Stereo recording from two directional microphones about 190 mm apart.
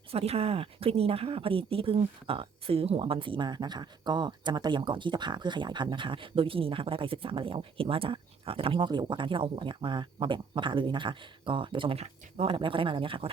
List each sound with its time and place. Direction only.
0.1 s speech: 30° right (ahead or behind)